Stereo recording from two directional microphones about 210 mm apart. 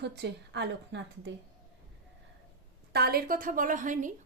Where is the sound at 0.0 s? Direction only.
55° right (ahead or behind).